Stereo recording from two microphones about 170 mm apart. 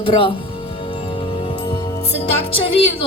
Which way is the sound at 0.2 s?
30° left (ahead or behind).